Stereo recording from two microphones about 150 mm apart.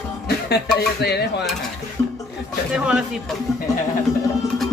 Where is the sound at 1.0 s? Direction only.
90° left.